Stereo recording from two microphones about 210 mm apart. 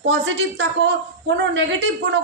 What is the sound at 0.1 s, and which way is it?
A man's voice, 60° right (ahead or behind).